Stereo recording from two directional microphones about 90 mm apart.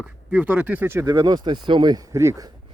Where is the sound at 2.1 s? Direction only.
35° right (ahead or behind).